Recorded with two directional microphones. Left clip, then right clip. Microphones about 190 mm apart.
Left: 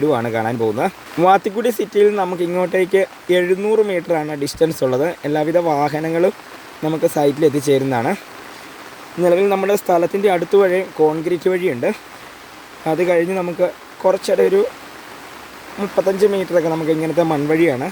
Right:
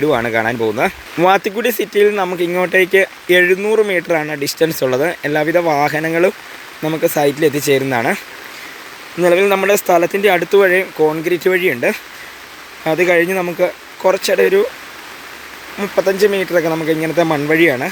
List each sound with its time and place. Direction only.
0.0 s speech: centre (ahead or behind)
9.2 s speech: 5° left (ahead or behind)
15.8 s speech: 5° left (ahead or behind)